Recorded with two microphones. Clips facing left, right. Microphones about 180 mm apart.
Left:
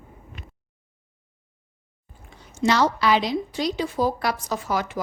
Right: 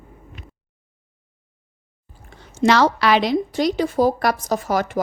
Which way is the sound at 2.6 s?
80° right.